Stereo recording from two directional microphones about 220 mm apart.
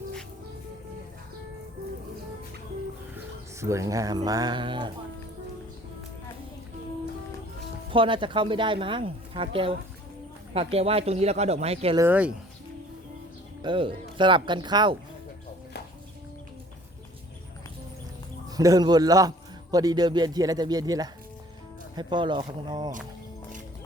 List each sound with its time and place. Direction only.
3.6 s a man's voice: 15° right (ahead or behind)
7.9 s speech: 25° right (ahead or behind)
11.9 s a man's voice: 10° right (ahead or behind)
13.6 s speech: 20° right (ahead or behind)
18.5 s a man's voice: 15° right (ahead or behind)